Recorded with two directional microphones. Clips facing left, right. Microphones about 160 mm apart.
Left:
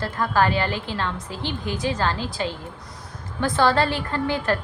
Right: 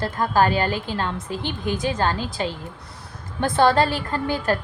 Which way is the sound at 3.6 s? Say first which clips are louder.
Right 2 dB; 45° right (ahead or behind).